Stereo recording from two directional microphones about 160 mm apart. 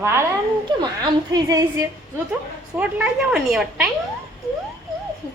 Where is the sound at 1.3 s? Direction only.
20° right (ahead or behind).